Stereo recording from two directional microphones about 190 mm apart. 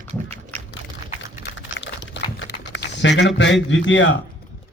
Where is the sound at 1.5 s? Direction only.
70° left (ahead or behind).